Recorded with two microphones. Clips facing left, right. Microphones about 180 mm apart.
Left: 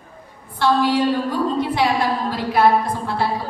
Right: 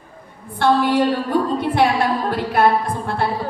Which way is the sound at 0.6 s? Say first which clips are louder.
Right 1 dB; 55° right (ahead or behind).